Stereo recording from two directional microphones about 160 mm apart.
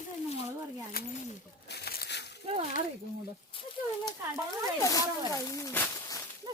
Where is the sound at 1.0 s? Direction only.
70° left (ahead or behind).